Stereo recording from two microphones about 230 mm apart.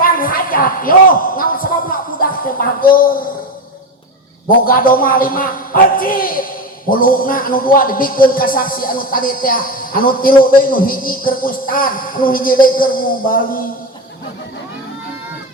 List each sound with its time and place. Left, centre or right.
0.0 s a sound: left
2.6 s speech: left
4.4 s speech: left